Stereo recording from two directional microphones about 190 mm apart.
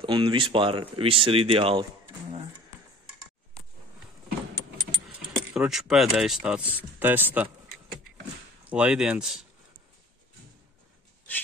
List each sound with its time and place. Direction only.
0.0 s speech: 25° right (ahead or behind)
5.5 s speech: 5° right (ahead or behind)
8.6 s speech: 5° right (ahead or behind)